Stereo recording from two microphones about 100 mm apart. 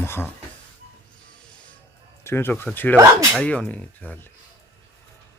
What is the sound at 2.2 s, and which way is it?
Speech, 20° left (ahead or behind).